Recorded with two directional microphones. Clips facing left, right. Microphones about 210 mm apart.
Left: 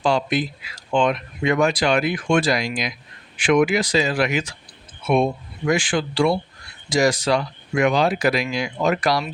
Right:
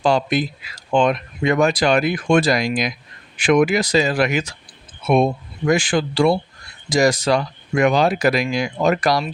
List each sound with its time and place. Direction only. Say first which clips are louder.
0.0 s speech: right 2 dB; 40° right (ahead or behind)